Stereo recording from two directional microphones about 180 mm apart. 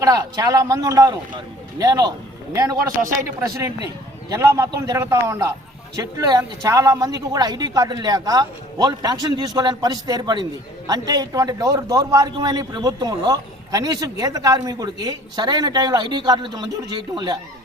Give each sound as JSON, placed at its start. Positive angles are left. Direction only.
{"t": 0.0, "sound": "a man's voice", "side_deg": -20}